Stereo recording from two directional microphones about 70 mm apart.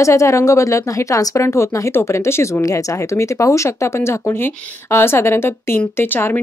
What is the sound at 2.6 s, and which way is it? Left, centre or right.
Speech, left.